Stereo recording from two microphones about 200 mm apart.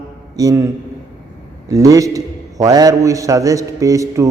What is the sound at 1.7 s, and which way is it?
A man's voice, 15° right (ahead or behind).